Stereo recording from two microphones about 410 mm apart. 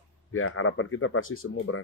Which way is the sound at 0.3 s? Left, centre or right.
Left.